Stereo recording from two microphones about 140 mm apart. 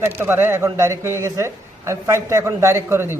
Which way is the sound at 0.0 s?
15° right (ahead or behind).